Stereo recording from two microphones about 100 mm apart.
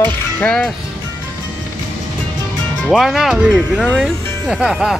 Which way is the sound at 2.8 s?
Centre (ahead or behind).